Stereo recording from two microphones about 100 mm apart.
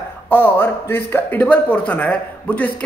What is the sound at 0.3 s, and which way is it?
A man's voice, 20° left (ahead or behind).